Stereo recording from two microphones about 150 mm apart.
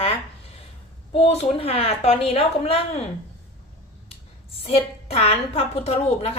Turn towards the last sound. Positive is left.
turn(degrees=45)  # may be behind; listen again after turning